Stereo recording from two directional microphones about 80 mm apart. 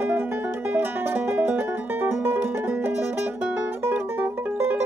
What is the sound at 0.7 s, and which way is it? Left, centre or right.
Music, right.